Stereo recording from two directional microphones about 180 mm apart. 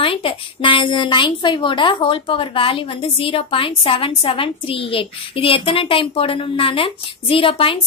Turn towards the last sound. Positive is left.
turn(degrees=30)  # may be behind; listen again after turning